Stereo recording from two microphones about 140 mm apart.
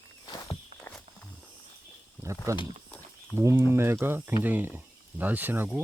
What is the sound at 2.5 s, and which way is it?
Speech, 20° right (ahead or behind).